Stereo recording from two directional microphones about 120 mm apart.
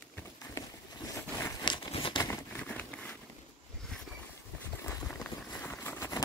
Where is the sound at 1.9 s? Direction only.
45° left (ahead or behind).